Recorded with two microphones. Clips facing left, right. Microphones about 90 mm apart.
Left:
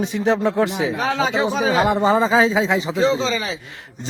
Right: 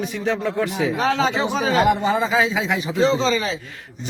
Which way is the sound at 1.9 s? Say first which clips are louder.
Left 3 dB; 35° left (ahead or behind).